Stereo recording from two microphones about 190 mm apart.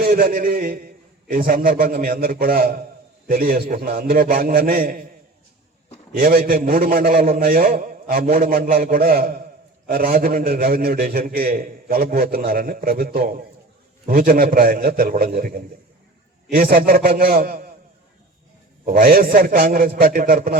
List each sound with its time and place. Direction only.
0.0 s a man's voice: 50° right (ahead or behind)
6.1 s a man's voice: 50° right (ahead or behind)
18.9 s a man's voice: 50° right (ahead or behind)